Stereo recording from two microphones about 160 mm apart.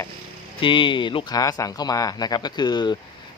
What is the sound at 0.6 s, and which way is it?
A man's voice, 30° left (ahead or behind).